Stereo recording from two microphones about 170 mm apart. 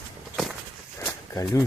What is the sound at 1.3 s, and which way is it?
Speech, 20° left (ahead or behind).